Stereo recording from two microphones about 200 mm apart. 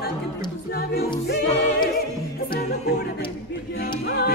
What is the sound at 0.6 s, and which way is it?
Music, 50° left (ahead or behind).